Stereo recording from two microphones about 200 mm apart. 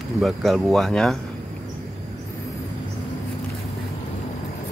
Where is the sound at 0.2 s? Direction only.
Centre (ahead or behind).